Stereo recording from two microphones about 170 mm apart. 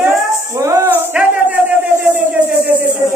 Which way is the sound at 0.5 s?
15° right (ahead or behind).